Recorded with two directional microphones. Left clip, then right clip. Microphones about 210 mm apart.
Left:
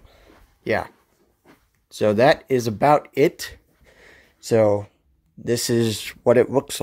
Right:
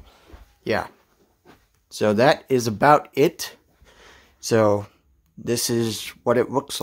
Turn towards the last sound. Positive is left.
turn(degrees=5)  # may be behind; listen again after turning